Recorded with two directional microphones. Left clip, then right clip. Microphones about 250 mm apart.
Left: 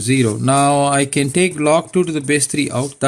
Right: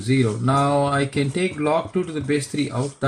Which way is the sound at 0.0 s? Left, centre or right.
Left.